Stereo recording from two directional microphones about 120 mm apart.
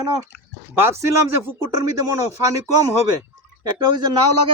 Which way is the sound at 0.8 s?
20° right (ahead or behind).